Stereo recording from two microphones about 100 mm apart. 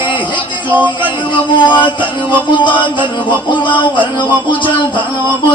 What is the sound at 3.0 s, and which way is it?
Music, 15° right (ahead or behind).